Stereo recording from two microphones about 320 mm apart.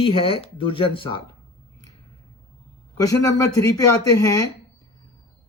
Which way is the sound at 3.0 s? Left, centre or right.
Centre.